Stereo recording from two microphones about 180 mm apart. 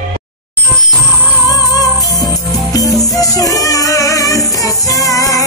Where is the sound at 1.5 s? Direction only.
20° left (ahead or behind).